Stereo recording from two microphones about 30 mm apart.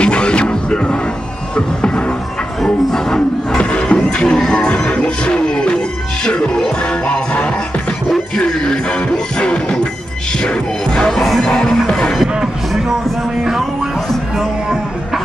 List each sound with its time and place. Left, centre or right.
0.0 s music: left
3.5 s music: left
8.6 s music: left